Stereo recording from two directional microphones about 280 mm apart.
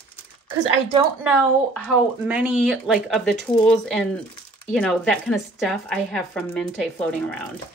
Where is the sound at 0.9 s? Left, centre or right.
Centre.